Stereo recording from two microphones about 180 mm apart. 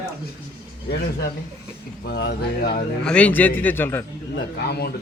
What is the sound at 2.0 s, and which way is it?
Speech, 70° left (ahead or behind).